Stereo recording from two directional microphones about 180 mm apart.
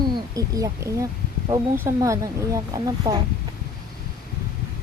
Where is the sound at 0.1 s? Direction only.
20° right (ahead or behind).